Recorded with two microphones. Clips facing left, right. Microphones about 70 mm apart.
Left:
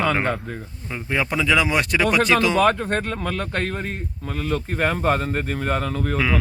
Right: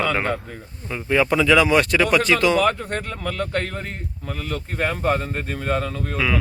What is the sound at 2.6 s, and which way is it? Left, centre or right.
Speech, left.